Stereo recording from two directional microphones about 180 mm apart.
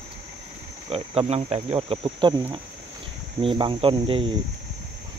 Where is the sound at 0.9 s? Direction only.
30° right (ahead or behind).